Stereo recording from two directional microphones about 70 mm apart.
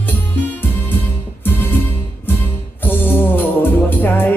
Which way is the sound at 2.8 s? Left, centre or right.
Left.